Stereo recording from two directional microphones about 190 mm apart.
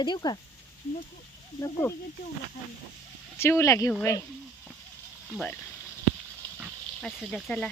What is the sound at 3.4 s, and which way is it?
Speech, 15° left (ahead or behind).